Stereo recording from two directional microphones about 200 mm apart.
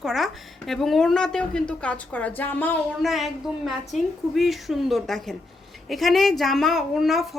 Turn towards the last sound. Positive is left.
turn(degrees=0)  # may be behind; listen again after turning